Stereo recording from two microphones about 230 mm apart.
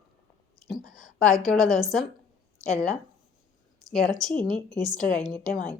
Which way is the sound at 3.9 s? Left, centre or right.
Centre.